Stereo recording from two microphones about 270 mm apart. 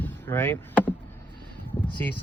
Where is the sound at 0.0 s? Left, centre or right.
Centre.